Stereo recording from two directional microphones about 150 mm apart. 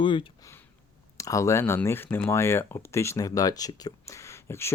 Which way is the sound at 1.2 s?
20° left (ahead or behind).